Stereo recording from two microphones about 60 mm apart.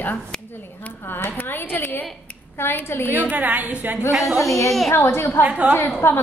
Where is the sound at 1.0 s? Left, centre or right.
Left.